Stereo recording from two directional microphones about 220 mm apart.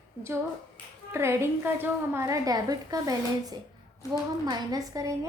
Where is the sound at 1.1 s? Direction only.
10° right (ahead or behind).